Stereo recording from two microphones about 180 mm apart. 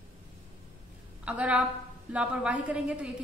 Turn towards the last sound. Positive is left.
turn(degrees=-5)  # may be behind; listen again after turning